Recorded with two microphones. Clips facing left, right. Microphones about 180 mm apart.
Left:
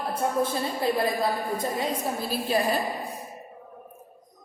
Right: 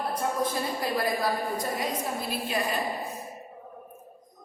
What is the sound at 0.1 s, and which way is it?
A woman's voice, 25° left (ahead or behind).